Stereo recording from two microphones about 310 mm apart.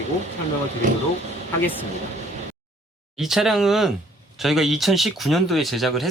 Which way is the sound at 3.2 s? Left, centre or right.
Centre.